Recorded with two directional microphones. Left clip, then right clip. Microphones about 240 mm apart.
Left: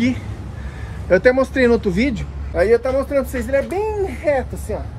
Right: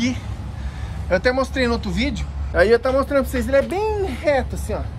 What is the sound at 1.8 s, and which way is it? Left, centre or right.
Speech, right.